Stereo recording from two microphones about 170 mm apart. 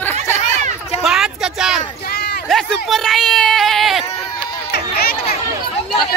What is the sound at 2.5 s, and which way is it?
Speech, centre (ahead or behind).